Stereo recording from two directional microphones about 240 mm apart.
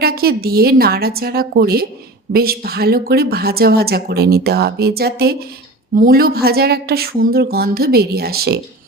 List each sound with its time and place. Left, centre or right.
0.0 s speech: right